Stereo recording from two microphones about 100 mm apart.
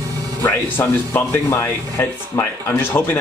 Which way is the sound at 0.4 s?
20° left (ahead or behind).